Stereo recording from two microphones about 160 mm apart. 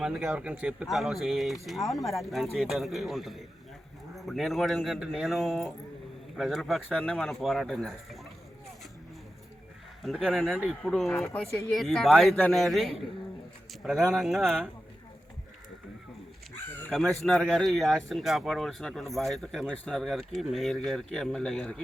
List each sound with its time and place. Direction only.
0.0 s speech: 5° right (ahead or behind)
10.0 s speech: centre (ahead or behind)
11.1 s speech: 15° left (ahead or behind)
11.7 s speech: centre (ahead or behind)
16.9 s speech: centre (ahead or behind)